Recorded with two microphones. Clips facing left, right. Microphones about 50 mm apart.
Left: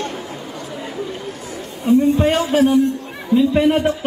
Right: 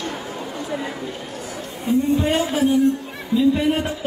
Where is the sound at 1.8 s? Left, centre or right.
Left.